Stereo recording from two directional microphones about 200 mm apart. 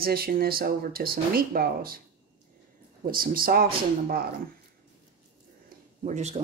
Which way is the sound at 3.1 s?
45° right (ahead or behind).